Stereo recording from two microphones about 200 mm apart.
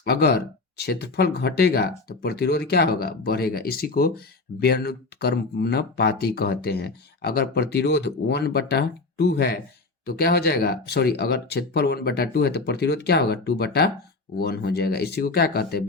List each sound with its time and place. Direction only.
0.0 s speech: 50° left (ahead or behind)